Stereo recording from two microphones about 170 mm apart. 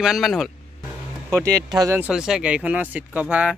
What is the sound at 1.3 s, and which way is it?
Speech, 20° right (ahead or behind).